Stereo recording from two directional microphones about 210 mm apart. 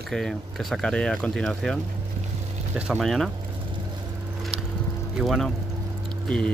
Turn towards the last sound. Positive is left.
turn(degrees=5)  # may be behind; listen again after turning